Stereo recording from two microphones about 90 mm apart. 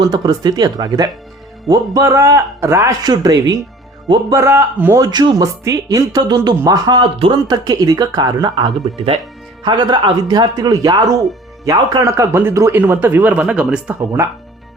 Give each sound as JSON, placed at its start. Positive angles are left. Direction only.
{"t": 0.0, "sound": "speech", "side_deg": -45}
{"t": 3.0, "sound": "speech", "side_deg": -45}
{"t": 4.3, "sound": "speech", "side_deg": -30}
{"t": 4.9, "sound": "speech", "side_deg": -45}
{"t": 12.7, "sound": "speech", "side_deg": -20}
{"t": 14.0, "sound": "speech", "side_deg": -30}